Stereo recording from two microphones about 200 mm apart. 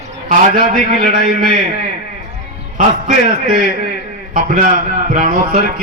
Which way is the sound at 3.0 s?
45° right (ahead or behind).